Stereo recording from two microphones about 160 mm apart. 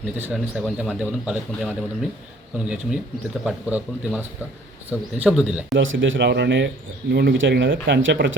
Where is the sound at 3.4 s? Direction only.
10° right (ahead or behind).